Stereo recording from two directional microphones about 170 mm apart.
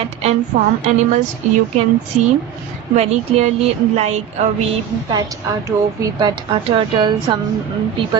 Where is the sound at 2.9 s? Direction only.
40° right (ahead or behind).